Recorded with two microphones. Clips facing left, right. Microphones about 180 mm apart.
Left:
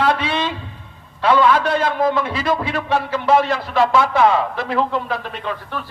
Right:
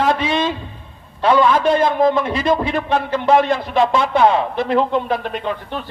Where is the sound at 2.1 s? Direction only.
25° right (ahead or behind).